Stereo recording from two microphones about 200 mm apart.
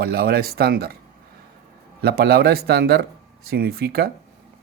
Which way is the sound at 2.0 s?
50° right (ahead or behind).